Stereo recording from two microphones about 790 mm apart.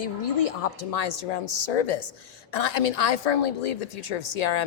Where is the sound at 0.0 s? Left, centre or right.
Left.